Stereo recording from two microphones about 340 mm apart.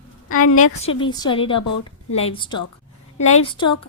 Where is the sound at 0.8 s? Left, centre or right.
Centre.